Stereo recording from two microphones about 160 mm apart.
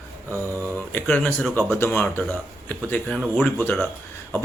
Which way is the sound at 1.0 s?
10° left (ahead or behind).